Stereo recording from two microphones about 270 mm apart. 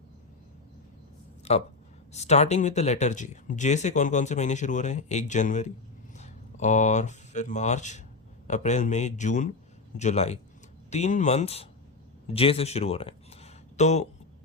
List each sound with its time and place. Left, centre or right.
2.1 s speech: left